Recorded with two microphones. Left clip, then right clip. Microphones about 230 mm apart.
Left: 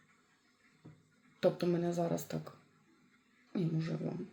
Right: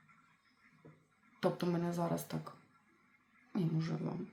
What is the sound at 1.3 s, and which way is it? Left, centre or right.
Speech, centre.